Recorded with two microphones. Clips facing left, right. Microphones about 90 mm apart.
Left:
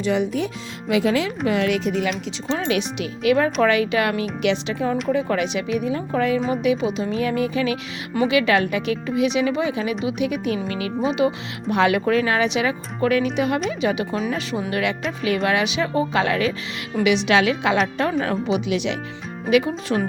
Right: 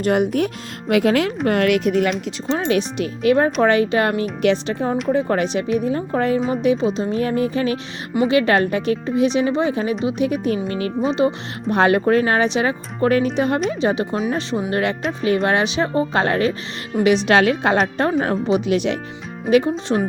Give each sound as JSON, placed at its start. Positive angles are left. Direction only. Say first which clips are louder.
{"t": 0.0, "sound": "speech", "louder": "right 4 dB", "side_deg": -55}
{"t": 19.5, "sound": "speech", "louder": "right 3 dB", "side_deg": -30}